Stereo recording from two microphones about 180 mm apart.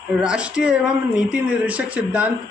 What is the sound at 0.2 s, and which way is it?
A man's voice, 5° right (ahead or behind).